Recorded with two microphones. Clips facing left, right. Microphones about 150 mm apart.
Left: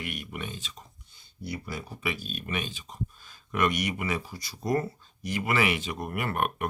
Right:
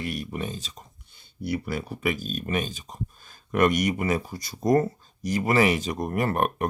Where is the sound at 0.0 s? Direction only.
35° right (ahead or behind).